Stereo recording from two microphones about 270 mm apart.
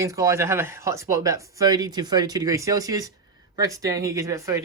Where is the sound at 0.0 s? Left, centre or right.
Centre.